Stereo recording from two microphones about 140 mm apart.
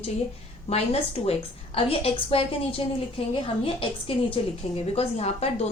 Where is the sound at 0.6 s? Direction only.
45° left (ahead or behind).